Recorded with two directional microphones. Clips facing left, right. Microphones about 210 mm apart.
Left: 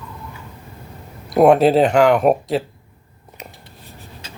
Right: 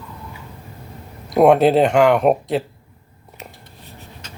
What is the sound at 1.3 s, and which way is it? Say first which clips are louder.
Speech: even; centre (ahead or behind).